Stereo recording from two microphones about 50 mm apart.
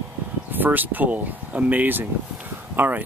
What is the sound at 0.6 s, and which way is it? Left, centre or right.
Speech, right.